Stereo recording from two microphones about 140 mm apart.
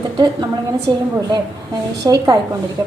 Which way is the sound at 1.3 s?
25° right (ahead or behind).